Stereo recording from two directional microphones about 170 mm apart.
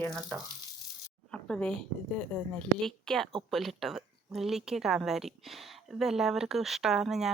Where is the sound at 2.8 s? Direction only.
Centre (ahead or behind).